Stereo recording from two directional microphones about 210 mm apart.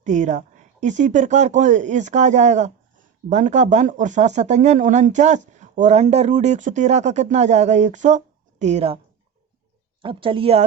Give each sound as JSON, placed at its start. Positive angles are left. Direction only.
{"t": 0.0, "sound": "speech", "side_deg": -35}
{"t": 10.0, "sound": "speech", "side_deg": -25}